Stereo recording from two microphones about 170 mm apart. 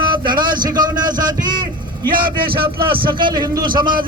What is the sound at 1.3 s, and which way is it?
Vehicle, 25° right (ahead or behind).